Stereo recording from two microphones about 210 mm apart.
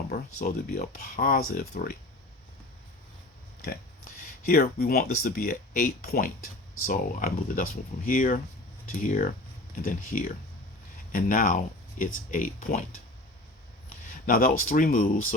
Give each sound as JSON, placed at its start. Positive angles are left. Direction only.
{"t": 0.4, "sound": "speech", "side_deg": 45}
{"t": 4.4, "sound": "speech", "side_deg": 45}
{"t": 14.1, "sound": "a sound", "side_deg": 45}
{"t": 14.7, "sound": "speech", "side_deg": 40}